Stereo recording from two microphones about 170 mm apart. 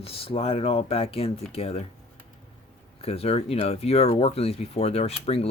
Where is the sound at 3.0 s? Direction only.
35° left (ahead or behind).